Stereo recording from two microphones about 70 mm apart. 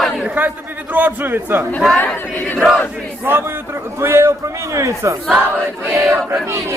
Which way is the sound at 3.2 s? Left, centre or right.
Right.